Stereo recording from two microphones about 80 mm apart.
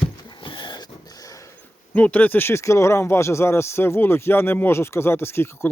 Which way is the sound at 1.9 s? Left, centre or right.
Centre.